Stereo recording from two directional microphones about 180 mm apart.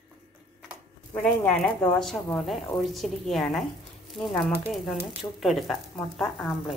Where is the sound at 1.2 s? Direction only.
5° left (ahead or behind).